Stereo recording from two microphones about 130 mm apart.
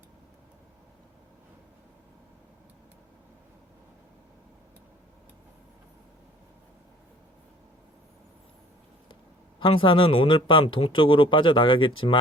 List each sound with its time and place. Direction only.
9.6 s speech: 40° left (ahead or behind)